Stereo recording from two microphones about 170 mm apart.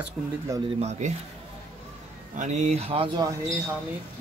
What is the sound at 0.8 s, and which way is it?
Speech, 40° right (ahead or behind).